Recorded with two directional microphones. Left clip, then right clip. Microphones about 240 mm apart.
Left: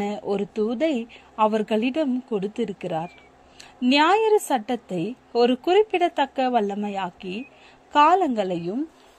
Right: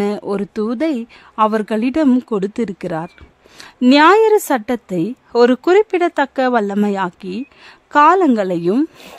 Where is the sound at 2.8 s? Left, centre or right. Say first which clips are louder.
Right 5 dB; right.